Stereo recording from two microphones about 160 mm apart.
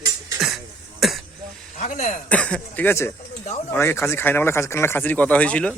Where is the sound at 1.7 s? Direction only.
50° left (ahead or behind).